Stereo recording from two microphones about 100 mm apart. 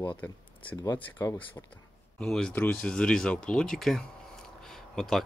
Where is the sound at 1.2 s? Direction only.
35° left (ahead or behind).